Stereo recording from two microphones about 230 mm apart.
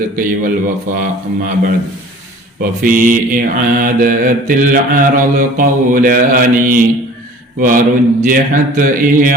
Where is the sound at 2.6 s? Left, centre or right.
Right.